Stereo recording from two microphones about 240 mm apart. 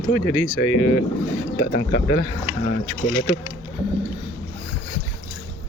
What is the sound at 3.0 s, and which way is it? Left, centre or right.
Speech, left.